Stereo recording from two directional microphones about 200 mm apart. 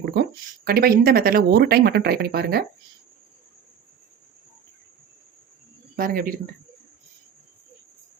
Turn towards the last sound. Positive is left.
turn(degrees=-45)  # may be behind; listen again after turning